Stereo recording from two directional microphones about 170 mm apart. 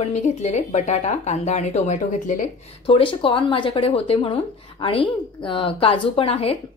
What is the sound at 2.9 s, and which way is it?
Speech, 30° left (ahead or behind).